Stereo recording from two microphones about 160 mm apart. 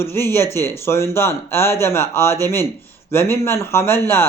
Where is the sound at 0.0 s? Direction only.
15° left (ahead or behind).